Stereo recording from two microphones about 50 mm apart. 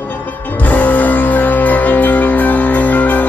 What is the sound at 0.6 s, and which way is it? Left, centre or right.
Music, left.